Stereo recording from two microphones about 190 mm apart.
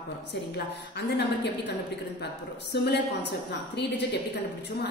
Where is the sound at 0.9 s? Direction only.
65° left (ahead or behind).